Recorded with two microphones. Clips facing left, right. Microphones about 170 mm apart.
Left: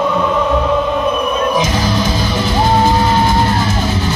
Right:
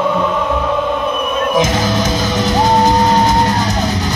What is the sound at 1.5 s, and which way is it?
Music, 45° right (ahead or behind).